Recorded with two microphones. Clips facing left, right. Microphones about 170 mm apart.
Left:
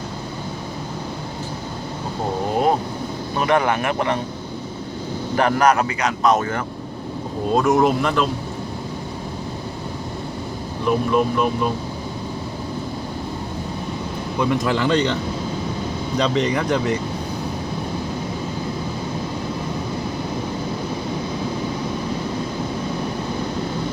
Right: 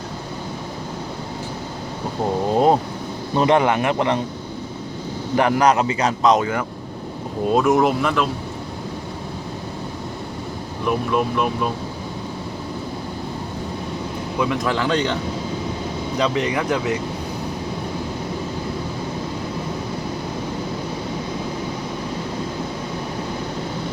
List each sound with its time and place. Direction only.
3.3 s a man's voice: 25° right (ahead or behind)
5.4 s a man's voice: 15° right (ahead or behind)
6.3 s speech: 15° right (ahead or behind)
10.8 s speech: centre (ahead or behind)
14.5 s speech: centre (ahead or behind)
16.1 s speech: 5° right (ahead or behind)